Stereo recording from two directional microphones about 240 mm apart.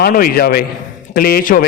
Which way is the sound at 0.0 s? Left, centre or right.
Left.